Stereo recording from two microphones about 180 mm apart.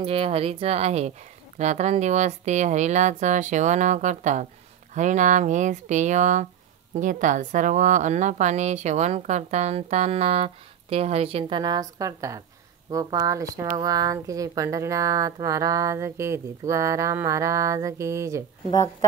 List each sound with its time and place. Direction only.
0.0 s a woman's voice: 30° right (ahead or behind); by 18.4 s 15° right (ahead or behind)
18.7 s speech: 20° left (ahead or behind)